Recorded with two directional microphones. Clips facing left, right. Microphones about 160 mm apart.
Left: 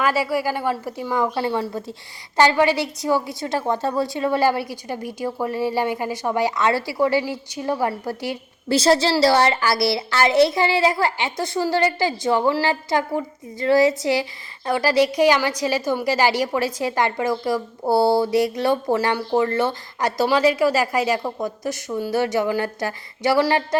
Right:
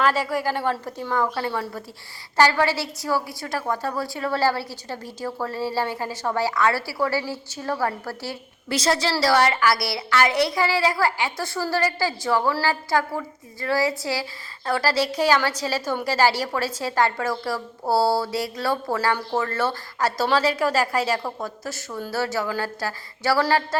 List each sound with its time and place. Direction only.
0.0 s a woman's voice: 10° left (ahead or behind)
8.7 s a sound: 30° left (ahead or behind)
19.1 s a woman's voice: 15° left (ahead or behind)